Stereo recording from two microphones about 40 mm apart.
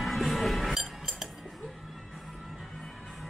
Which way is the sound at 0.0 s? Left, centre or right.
Centre.